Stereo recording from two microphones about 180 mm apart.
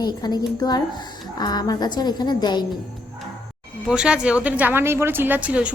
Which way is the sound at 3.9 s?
5° right (ahead or behind).